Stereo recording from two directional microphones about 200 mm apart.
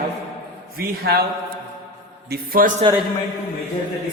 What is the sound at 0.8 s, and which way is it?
Speech, 50° right (ahead or behind).